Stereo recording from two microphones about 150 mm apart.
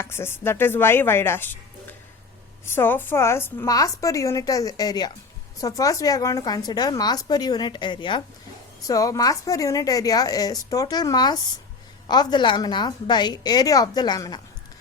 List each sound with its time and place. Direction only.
0.0 s a woman's voice: 15° left (ahead or behind)